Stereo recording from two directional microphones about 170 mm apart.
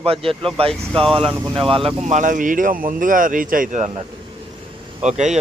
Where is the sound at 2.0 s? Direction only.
45° right (ahead or behind).